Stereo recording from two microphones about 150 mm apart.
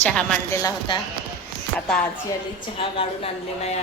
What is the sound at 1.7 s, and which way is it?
Speech, 10° left (ahead or behind).